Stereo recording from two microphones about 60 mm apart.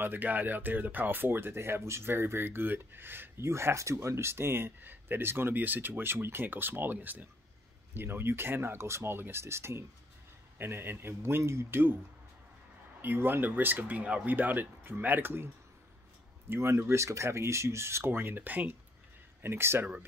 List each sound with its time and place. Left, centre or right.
0.0 s speech: right
13.0 s speech: right
19.4 s speech: right